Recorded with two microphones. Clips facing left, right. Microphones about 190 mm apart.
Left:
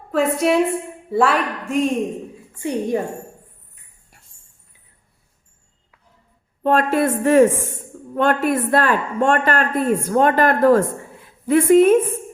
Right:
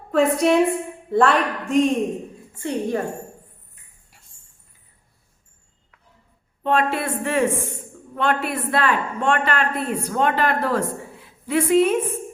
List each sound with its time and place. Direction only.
0.1 s a woman's voice: centre (ahead or behind)
6.6 s a woman's voice: 45° left (ahead or behind)